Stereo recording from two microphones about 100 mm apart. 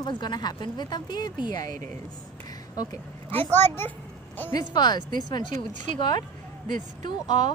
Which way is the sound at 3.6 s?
20° left (ahead or behind).